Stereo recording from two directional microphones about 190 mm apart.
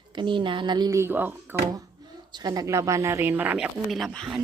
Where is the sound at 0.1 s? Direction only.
25° right (ahead or behind); by 4.4 s centre (ahead or behind).